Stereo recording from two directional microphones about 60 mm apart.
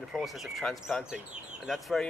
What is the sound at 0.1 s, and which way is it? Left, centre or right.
Speech, centre.